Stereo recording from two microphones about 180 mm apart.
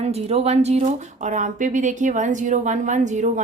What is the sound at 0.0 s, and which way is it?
Speech, 35° right (ahead or behind).